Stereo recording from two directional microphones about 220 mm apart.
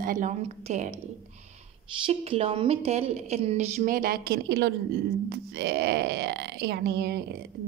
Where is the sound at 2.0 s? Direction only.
25° right (ahead or behind); by 7.2 s 45° right (ahead or behind).